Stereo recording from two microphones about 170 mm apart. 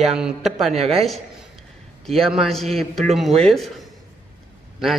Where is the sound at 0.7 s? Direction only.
40° right (ahead or behind).